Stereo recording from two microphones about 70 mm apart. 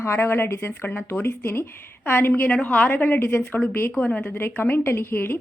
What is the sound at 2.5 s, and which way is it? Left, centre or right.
A woman's voice, centre.